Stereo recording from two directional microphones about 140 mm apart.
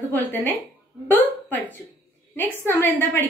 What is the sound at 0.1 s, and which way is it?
Speech, 15° left (ahead or behind).